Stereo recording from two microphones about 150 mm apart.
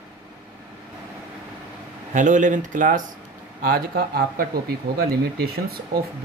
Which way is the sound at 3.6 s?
80° right.